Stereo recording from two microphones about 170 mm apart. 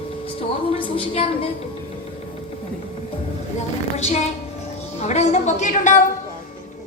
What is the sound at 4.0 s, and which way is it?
A woman's voice, 40° left (ahead or behind).